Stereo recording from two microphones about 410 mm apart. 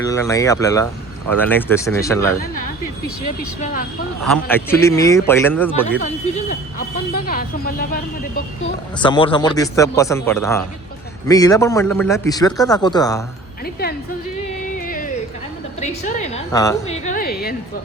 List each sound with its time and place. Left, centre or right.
0.0 s a man's voice: centre
3.6 s speech: centre
4.4 s speech: centre
6.0 s a man's voice: centre
14.8 s a sound: centre
15.8 s a man's voice: centre